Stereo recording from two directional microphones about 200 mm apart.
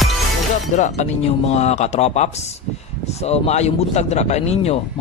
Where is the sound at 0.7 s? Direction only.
35° left (ahead or behind).